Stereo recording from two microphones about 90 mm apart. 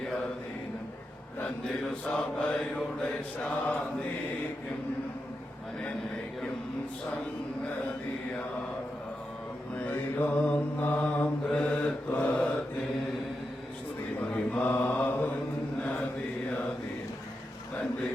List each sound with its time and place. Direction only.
1.6 s mantra: 15° left (ahead or behind)
9.7 s mantra: 20° left (ahead or behind)
14.3 s mantra: 15° left (ahead or behind)